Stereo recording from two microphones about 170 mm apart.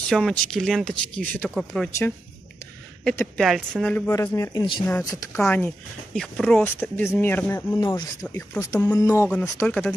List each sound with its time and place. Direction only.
0.1 s speech: 5° left (ahead or behind)
3.3 s speech: centre (ahead or behind)